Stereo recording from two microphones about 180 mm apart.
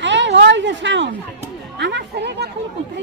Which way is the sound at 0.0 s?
90° right.